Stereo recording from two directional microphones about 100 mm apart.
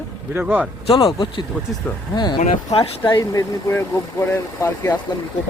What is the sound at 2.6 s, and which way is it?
Speech, 70° left (ahead or behind).